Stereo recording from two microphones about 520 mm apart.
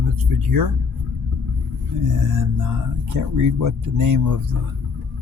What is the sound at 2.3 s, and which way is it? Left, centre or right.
Speech, right.